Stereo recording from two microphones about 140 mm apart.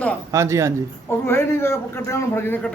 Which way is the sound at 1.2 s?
20° left (ahead or behind).